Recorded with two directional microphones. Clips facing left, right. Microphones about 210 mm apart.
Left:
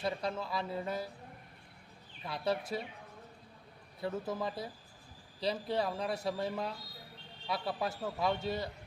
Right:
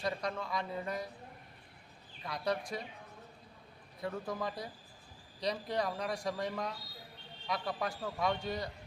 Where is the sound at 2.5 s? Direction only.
5° left (ahead or behind).